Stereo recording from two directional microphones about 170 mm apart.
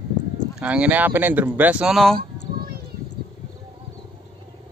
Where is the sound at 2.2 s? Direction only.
65° right (ahead or behind).